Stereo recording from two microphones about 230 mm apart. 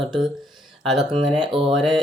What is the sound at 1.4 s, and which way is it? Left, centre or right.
Speech, right.